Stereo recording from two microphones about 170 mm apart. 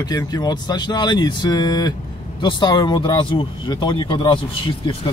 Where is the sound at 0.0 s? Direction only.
20° left (ahead or behind).